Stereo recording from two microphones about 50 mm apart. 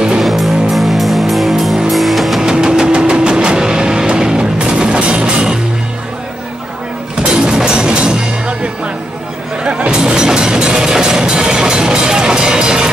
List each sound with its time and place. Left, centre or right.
0.2 s music: centre
2.4 s vehicle: centre
7.2 s music: centre